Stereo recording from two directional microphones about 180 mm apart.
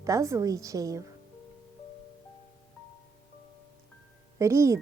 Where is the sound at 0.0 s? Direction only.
15° right (ahead or behind).